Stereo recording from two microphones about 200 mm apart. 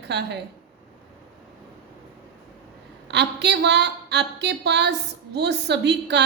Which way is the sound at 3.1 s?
60° right (ahead or behind).